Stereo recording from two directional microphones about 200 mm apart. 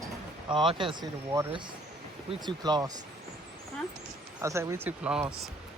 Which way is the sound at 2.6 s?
20° right (ahead or behind).